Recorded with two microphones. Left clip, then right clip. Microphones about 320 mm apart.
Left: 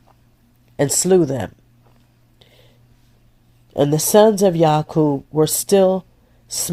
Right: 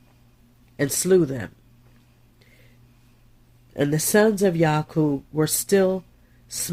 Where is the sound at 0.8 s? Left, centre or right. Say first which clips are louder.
Left 4 dB; left.